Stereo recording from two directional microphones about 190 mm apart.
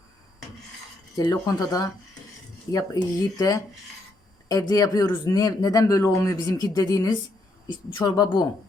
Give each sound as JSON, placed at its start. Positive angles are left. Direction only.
{"t": 1.1, "sound": "speech", "side_deg": 20}